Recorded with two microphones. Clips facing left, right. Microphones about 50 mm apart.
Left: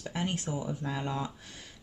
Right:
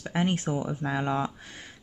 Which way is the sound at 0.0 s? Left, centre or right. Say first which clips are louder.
Right 6 dB; right.